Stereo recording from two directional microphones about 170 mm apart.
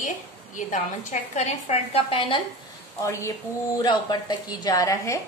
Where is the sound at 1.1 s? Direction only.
40° left (ahead or behind).